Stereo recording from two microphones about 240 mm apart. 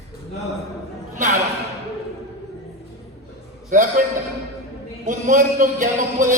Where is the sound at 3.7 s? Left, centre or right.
Right.